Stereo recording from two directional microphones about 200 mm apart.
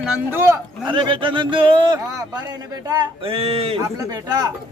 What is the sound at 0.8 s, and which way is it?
Speech, 25° right (ahead or behind).